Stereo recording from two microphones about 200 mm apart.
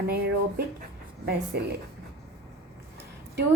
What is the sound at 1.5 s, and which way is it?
Speech, 55° right (ahead or behind).